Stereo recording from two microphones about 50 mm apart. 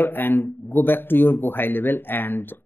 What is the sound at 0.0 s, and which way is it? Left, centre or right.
Speech, left.